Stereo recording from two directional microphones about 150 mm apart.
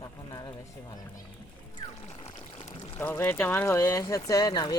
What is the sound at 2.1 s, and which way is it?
Pour, 45° left (ahead or behind).